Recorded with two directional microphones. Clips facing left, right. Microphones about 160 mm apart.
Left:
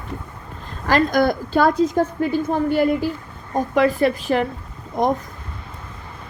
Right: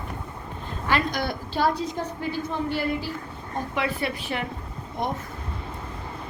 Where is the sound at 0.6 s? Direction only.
40° left (ahead or behind).